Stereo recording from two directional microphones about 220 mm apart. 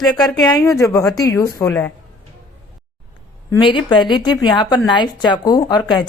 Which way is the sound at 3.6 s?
20° left (ahead or behind).